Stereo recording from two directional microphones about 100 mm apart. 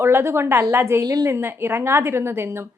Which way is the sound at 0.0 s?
25° right (ahead or behind).